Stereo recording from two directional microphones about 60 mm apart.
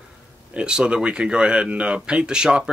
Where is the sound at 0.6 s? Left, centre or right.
Centre.